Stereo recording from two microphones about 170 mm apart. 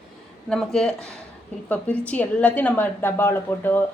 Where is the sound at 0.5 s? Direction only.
5° left (ahead or behind).